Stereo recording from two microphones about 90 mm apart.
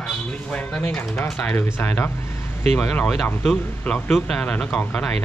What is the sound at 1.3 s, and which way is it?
Speech, 10° left (ahead or behind).